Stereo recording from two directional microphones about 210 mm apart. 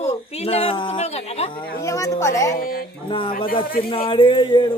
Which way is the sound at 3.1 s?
25° left (ahead or behind).